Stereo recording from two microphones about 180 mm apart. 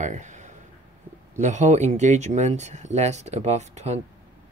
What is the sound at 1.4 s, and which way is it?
Speech, 40° right (ahead or behind).